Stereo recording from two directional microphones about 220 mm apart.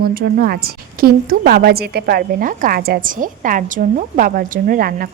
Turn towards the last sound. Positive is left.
turn(degrees=-40)  # may be behind; listen again after turning